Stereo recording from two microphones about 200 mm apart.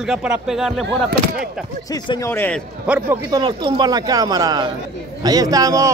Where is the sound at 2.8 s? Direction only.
5° right (ahead or behind).